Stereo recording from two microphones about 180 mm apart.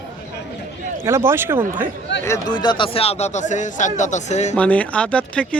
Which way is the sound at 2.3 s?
25° left (ahead or behind).